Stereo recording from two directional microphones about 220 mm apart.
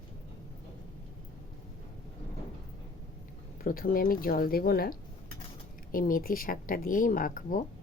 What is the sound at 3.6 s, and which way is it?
Speech, 40° left (ahead or behind).